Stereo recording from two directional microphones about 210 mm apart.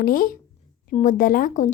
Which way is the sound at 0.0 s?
45° left (ahead or behind).